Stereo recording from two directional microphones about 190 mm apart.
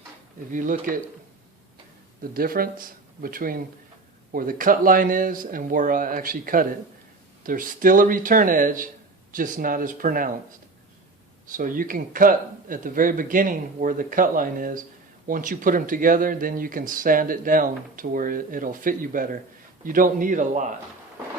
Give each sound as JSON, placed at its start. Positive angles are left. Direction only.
{"t": 0.5, "sound": "speech", "side_deg": -45}
{"t": 2.3, "sound": "speech", "side_deg": -50}
{"t": 11.5, "sound": "speech", "side_deg": -45}